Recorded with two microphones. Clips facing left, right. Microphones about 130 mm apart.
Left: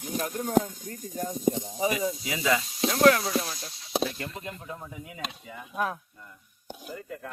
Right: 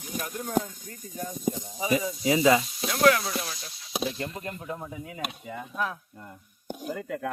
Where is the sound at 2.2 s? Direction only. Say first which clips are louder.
Right 10 dB; 30° right (ahead or behind).